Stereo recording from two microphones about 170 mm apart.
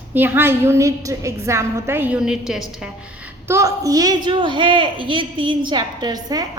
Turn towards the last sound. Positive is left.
turn(degrees=-25)  # may be behind; listen again after turning